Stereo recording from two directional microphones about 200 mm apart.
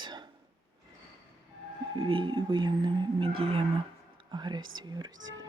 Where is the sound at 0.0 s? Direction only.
20° right (ahead or behind).